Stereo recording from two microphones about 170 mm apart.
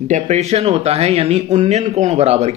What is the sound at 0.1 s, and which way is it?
Speech, 40° right (ahead or behind).